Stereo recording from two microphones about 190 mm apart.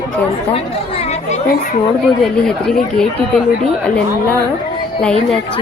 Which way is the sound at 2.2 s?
5° left (ahead or behind).